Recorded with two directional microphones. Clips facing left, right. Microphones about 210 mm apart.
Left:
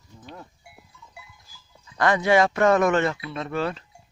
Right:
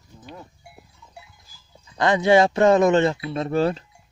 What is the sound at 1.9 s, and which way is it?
Speech, 20° right (ahead or behind).